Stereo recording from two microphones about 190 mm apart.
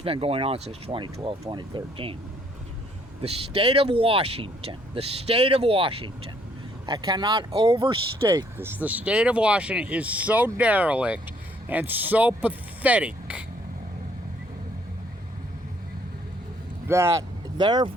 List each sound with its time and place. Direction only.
0.0 s speech: 30° right (ahead or behind)
3.2 s speech: 30° right (ahead or behind)
8.5 s speech: 10° right (ahead or behind)
16.9 s speech: 15° right (ahead or behind)